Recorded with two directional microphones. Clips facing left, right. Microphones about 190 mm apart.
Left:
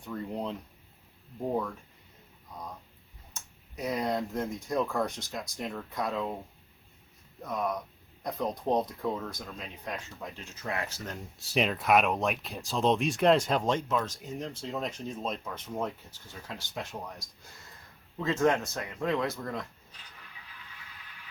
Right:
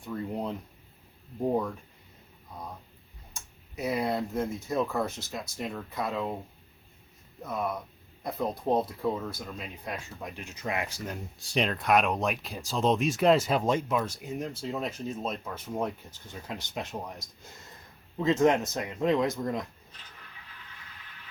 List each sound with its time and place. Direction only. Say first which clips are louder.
0.1 s a sound: right 2 dB; 5° right (ahead or behind)
3.3 s speech: right 2 dB; 10° right (ahead or behind)
7.4 s speech: even; 5° right (ahead or behind)
11.3 s speech: left 1 dB; 5° left (ahead or behind); by 19.6 s 20° right (ahead or behind)